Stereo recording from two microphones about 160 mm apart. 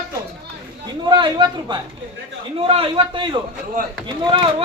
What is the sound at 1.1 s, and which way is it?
Speech, 30° right (ahead or behind).